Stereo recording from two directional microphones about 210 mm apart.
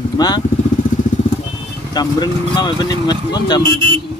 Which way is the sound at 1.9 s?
20° left (ahead or behind).